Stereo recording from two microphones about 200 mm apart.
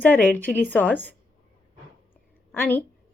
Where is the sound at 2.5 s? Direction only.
10° left (ahead or behind).